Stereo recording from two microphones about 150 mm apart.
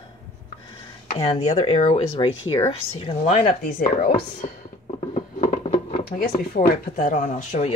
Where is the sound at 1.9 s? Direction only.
35° left (ahead or behind).